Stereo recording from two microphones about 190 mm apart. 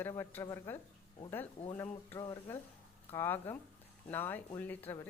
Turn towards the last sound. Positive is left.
turn(degrees=10)  # may be behind; listen again after turning